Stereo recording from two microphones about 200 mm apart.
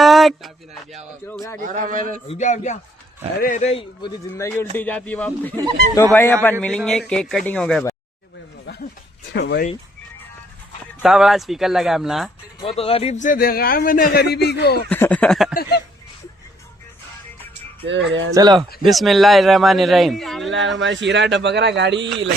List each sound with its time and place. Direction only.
0.0 s a sound: centre (ahead or behind)
1.3 s speech: 10° left (ahead or behind)
1.6 s speech: 40° right (ahead or behind)
2.2 s speech: 35° left (ahead or behind)
4.4 s speech: 10° left (ahead or behind)
9.3 s speech: 55° left (ahead or behind)
11.0 s speech: centre (ahead or behind)
12.5 s a man's voice: 30° left (ahead or behind); by 14.8 s 55° left (ahead or behind)
14.8 s speech: 10° left (ahead or behind)
17.5 s speech: 65° right (ahead or behind)
18.3 s speech: 20° right (ahead or behind)
18.8 s speech: centre (ahead or behind)
20.7 s speech: 65° right (ahead or behind)